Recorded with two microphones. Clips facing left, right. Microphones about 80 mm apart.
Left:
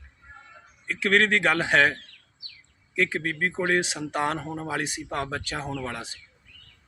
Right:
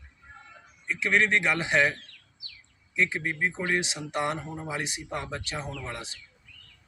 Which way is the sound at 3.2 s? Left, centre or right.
Left.